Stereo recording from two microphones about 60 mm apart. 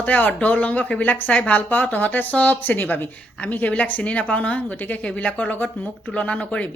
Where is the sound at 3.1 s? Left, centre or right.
Left.